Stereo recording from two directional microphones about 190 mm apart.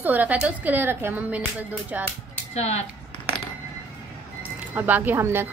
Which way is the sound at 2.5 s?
35° left (ahead or behind).